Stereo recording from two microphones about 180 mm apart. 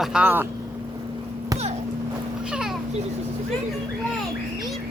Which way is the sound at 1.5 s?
20° right (ahead or behind).